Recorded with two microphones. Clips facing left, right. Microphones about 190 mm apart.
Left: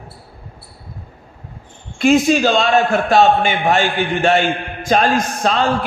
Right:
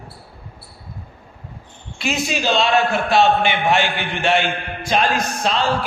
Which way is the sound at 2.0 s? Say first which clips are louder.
Left 11 dB; 50° left (ahead or behind).